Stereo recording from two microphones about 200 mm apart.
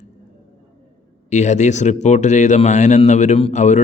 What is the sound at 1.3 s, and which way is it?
Speech, 35° left (ahead or behind).